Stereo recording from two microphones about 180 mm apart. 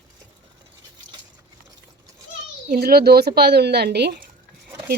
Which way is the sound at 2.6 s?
60° right (ahead or behind).